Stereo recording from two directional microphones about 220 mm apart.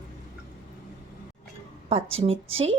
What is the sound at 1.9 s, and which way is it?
Speech, 25° right (ahead or behind).